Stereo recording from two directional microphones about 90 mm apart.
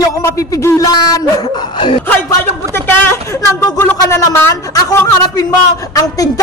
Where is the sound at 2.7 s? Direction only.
25° left (ahead or behind).